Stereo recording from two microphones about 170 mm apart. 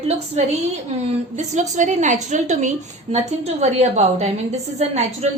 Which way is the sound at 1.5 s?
45° right (ahead or behind).